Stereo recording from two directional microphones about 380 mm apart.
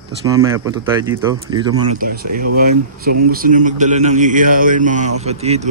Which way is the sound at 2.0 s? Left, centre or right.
Right.